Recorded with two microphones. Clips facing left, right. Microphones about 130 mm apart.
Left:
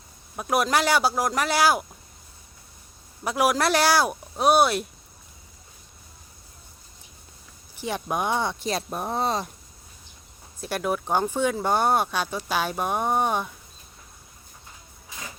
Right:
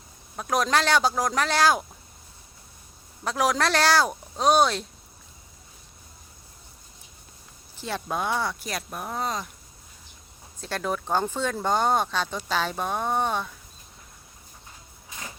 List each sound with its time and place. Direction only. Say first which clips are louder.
0.3 s speech: left 1 dB; 10° left (ahead or behind)
3.2 s speech: left 2 dB; 10° left (ahead or behind)
7.8 s speech: left 2 dB; 15° left (ahead or behind); by 9.5 s 30° left (ahead or behind)
10.6 s speech: left 2 dB; 10° left (ahead or behind)